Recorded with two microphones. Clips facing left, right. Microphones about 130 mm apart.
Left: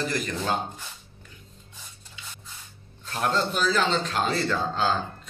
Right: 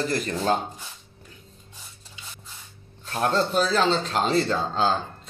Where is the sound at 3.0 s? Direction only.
35° right (ahead or behind).